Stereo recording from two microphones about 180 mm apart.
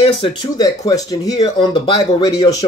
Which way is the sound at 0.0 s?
30° left (ahead or behind).